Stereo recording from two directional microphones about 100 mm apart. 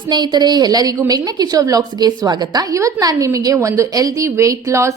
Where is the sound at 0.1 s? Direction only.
45° right (ahead or behind).